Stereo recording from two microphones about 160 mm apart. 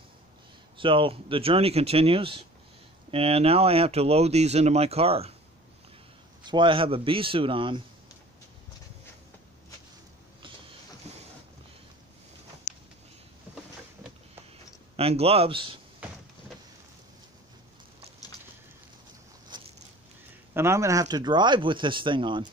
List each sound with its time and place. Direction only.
0.7 s speech: 30° right (ahead or behind)
6.4 s speech: 30° right (ahead or behind)
11.1 s boat: 45° right (ahead or behind)
15.0 s speech: 40° right (ahead or behind)
19.5 s vehicle: 25° right (ahead or behind)
20.5 s speech: 15° right (ahead or behind)